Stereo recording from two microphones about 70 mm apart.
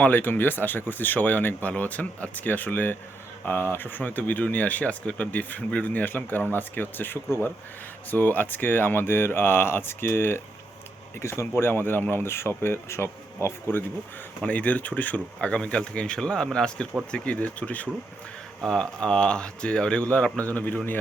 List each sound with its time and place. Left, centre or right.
0.0 s speech: left
14.4 s speech: left
18.6 s speech: centre; by 21.0 s left